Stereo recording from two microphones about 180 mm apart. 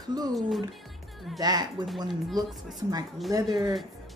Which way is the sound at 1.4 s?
20° right (ahead or behind).